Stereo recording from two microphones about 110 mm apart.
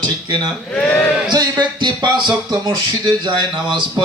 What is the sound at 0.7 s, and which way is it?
Speech, 15° left (ahead or behind).